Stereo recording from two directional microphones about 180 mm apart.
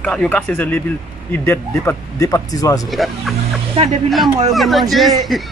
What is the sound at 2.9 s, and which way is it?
Speech, centre (ahead or behind).